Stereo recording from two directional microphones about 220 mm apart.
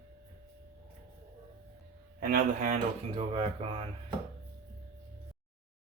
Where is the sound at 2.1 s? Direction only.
40° right (ahead or behind).